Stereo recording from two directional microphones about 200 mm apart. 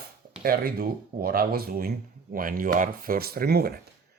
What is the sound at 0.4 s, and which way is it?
Speech, 50° right (ahead or behind).